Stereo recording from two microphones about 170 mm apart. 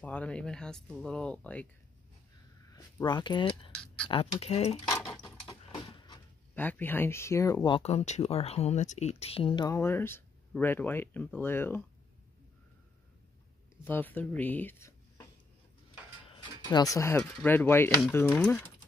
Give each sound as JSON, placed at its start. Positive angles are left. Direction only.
{"t": 0.0, "sound": "speech", "side_deg": 10}
{"t": 2.7, "sound": "speech", "side_deg": 25}
{"t": 4.8, "sound": "a sound", "side_deg": 15}
{"t": 5.7, "sound": "printer", "side_deg": 30}
{"t": 6.5, "sound": "speech", "side_deg": 10}
{"t": 7.8, "sound": "speech", "side_deg": 40}
{"t": 9.8, "sound": "speech", "side_deg": 15}
{"t": 13.8, "sound": "speech", "side_deg": 10}
{"t": 16.6, "sound": "speech", "side_deg": 20}
{"t": 17.2, "sound": "speech", "side_deg": 5}